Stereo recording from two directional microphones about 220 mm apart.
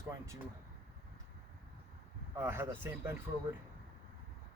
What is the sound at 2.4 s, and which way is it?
Speech, 10° right (ahead or behind).